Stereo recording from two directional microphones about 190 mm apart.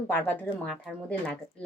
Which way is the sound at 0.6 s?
5° left (ahead or behind).